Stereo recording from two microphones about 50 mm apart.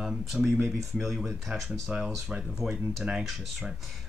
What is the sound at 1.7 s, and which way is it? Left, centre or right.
Speech, centre.